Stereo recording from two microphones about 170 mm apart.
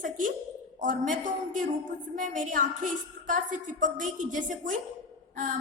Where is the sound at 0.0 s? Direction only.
50° right (ahead or behind).